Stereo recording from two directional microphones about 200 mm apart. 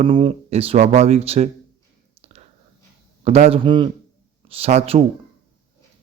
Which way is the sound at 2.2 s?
30° right (ahead or behind).